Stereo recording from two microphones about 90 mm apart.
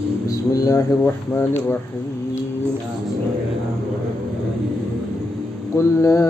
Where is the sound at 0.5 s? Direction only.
40° left (ahead or behind).